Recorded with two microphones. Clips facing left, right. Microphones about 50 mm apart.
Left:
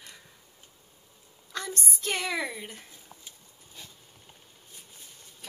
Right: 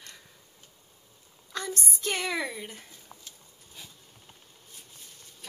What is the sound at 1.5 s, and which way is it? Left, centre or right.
A child's voice, centre.